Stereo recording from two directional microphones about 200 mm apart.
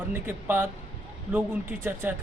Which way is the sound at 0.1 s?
10° right (ahead or behind).